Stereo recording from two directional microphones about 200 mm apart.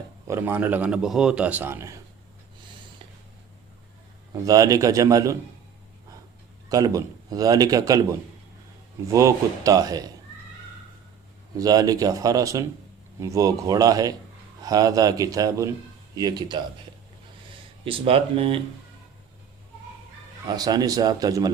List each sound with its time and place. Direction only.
0.3 s a man's voice: 10° right (ahead or behind)
4.4 s a man's voice: 15° right (ahead or behind)
6.7 s a man's voice: 20° right (ahead or behind)
11.5 s a man's voice: 20° right (ahead or behind)
17.8 s a man's voice: 25° right (ahead or behind)
20.5 s a man's voice: 20° right (ahead or behind)